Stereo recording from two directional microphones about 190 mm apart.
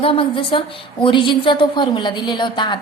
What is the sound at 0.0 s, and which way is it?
A woman's voice, 30° left (ahead or behind).